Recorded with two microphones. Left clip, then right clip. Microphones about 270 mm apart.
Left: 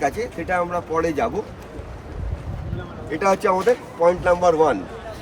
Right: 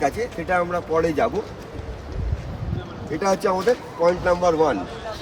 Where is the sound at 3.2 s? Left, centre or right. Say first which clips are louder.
Left 2 dB; left.